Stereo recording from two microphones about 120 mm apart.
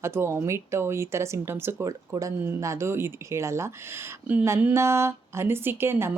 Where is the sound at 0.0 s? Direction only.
20° right (ahead or behind).